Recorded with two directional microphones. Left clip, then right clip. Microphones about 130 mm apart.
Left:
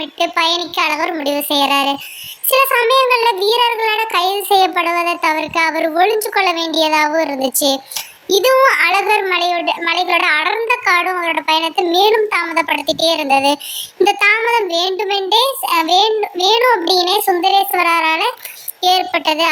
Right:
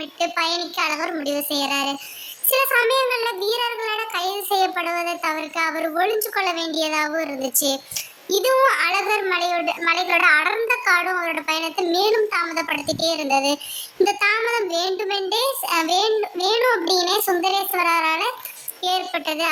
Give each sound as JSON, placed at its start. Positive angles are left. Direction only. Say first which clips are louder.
{"t": 0.2, "sound": "child singing", "louder": "left 7 dB", "side_deg": 15}
{"t": 18.8, "sound": "a child's voice", "louder": "left 9 dB", "side_deg": 20}